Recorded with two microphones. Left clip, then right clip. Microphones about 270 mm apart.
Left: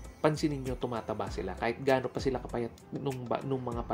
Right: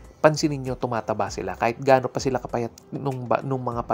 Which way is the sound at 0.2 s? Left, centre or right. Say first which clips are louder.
Right 10 dB; right.